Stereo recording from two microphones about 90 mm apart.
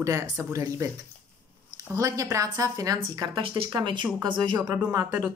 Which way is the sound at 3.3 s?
60° right (ahead or behind).